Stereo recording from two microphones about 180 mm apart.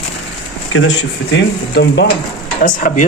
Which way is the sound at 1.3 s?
75° left (ahead or behind).